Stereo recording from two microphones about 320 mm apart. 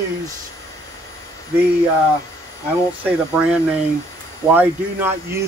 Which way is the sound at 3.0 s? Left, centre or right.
Centre.